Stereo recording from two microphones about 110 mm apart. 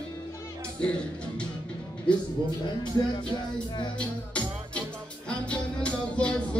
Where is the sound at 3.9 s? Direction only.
10° left (ahead or behind).